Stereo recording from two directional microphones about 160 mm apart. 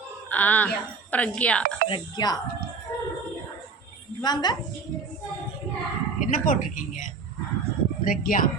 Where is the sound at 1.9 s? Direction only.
25° left (ahead or behind).